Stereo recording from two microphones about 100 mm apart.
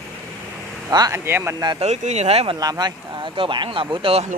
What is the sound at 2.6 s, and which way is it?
Speech, 40° right (ahead or behind).